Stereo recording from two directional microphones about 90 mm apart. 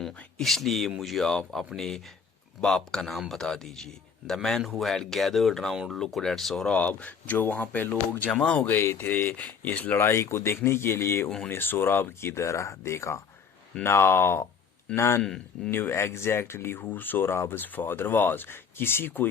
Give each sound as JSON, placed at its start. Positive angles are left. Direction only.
{"t": 0.3, "sound": "a man's voice", "side_deg": 0}
{"t": 15.2, "sound": "speech", "side_deg": 10}
{"t": 15.7, "sound": "speech", "side_deg": 25}